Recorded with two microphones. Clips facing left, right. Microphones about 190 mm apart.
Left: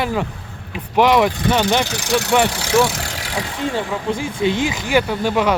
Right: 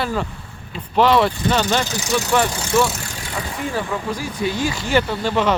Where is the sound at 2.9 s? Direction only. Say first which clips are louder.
Left 3 dB; 90° left.